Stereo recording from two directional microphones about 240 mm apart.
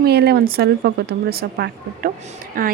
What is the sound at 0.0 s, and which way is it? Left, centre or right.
Speech, right.